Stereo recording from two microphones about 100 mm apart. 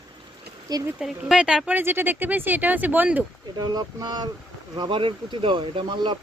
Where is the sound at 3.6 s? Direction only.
40° right (ahead or behind); by 5.8 s 60° right (ahead or behind).